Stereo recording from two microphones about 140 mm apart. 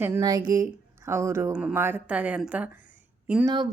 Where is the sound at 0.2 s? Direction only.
25° right (ahead or behind); by 2.6 s 10° right (ahead or behind).